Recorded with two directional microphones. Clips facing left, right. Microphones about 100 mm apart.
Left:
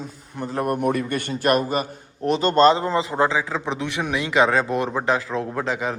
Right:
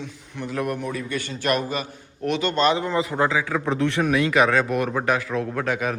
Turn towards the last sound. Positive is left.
turn(degrees=25)  # may be behind; listen again after turning